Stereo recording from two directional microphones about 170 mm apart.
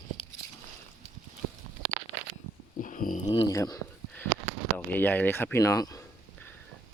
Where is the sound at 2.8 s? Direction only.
50° left (ahead or behind).